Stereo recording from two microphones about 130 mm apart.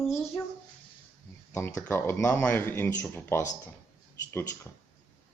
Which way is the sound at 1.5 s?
20° left (ahead or behind).